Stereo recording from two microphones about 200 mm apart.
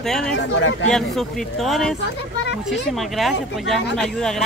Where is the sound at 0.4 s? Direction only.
65° left (ahead or behind).